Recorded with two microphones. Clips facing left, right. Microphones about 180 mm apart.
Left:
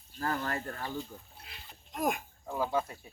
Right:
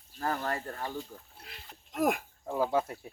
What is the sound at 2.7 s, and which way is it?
Speech, 60° right (ahead or behind).